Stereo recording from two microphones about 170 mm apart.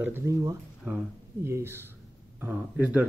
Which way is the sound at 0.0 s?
15° right (ahead or behind).